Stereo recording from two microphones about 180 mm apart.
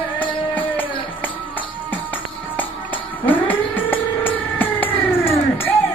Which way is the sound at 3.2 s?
10° left (ahead or behind).